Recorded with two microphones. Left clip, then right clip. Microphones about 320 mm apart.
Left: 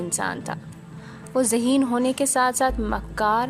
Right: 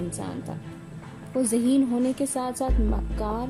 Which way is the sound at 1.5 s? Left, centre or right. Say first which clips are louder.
Right 1 dB; centre.